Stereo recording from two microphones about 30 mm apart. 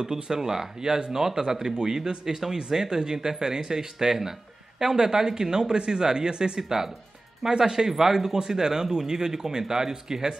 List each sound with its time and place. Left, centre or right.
0.1 s speech: centre
7.7 s speech: centre